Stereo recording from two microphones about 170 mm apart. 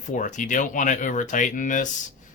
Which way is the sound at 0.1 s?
50° left (ahead or behind).